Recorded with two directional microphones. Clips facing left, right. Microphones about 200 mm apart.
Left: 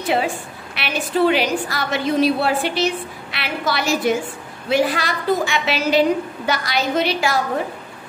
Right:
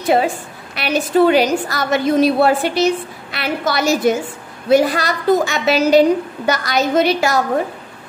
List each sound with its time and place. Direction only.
0.7 s a woman's voice: 40° right (ahead or behind)